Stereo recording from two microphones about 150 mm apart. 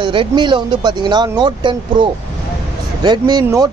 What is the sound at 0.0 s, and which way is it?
Speech, 35° right (ahead or behind).